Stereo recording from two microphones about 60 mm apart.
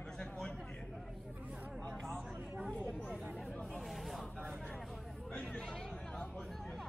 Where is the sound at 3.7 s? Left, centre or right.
Centre.